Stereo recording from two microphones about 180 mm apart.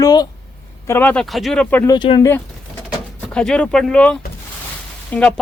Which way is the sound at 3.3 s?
5° left (ahead or behind).